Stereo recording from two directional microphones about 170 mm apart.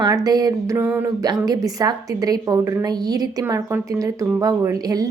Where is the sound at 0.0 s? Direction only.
20° right (ahead or behind).